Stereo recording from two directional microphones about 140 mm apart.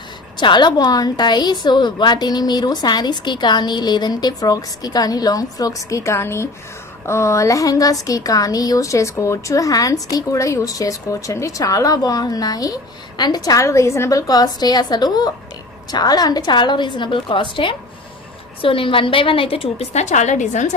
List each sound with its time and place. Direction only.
0.3 s a woman's voice: 35° left (ahead or behind); by 20.7 s 60° left (ahead or behind)